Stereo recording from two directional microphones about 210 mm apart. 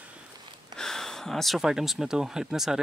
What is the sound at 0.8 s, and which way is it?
Speech, centre (ahead or behind).